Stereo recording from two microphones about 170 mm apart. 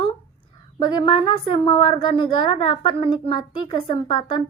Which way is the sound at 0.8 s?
30° left (ahead or behind).